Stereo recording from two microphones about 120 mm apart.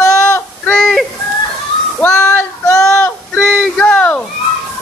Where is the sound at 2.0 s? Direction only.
20° left (ahead or behind).